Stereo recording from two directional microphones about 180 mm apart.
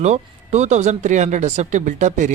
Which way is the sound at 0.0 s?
40° right (ahead or behind).